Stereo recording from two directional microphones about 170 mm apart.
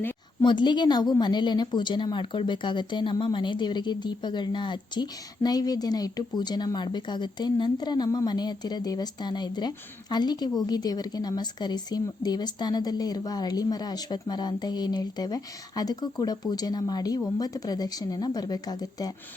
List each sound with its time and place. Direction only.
0.4 s a woman's voice: 25° left (ahead or behind)